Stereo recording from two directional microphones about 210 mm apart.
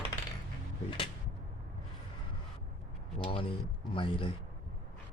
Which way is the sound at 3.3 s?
25° left (ahead or behind).